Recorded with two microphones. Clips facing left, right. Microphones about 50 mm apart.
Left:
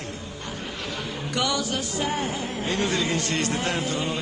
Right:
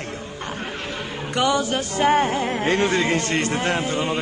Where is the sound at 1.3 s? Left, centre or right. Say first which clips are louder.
Right 6 dB; right.